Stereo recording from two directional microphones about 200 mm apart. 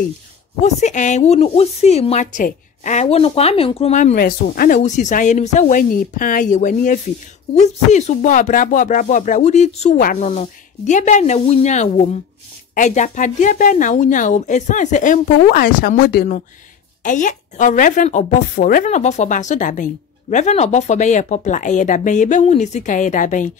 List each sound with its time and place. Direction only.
0.6 s a woman's voice: 35° left (ahead or behind); by 16.3 s 50° left (ahead or behind)
17.0 s a woman's voice: 40° left (ahead or behind)